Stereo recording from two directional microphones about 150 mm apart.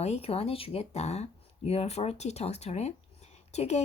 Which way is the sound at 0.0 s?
45° left (ahead or behind).